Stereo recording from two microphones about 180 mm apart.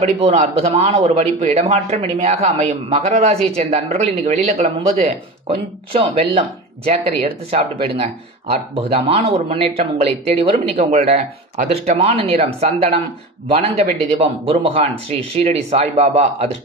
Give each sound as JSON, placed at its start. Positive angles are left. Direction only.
{"t": 0.2, "sound": "speech", "side_deg": -35}